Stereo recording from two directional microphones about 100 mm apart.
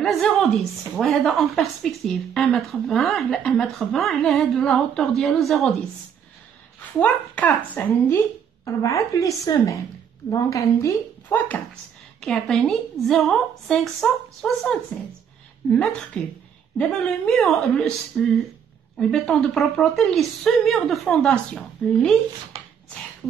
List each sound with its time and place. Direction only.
0.0 s speech: 5° left (ahead or behind)
7.0 s speech: 15° left (ahead or behind)
8.6 s a woman's voice: 35° left (ahead or behind); by 11.6 s 15° left (ahead or behind)
12.2 s speech: 5° left (ahead or behind)